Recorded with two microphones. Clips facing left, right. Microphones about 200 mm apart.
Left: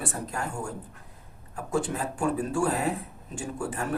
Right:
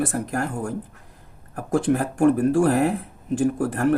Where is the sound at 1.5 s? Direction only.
85° right.